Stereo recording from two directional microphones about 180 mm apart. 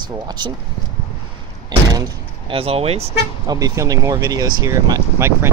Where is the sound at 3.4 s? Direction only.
20° right (ahead or behind).